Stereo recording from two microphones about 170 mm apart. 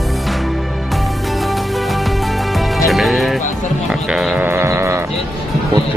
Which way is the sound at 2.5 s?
Centre (ahead or behind).